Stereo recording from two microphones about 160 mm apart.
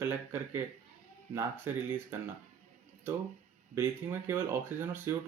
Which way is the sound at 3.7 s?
15° right (ahead or behind).